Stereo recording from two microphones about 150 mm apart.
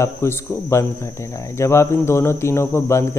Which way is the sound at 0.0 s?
15° left (ahead or behind).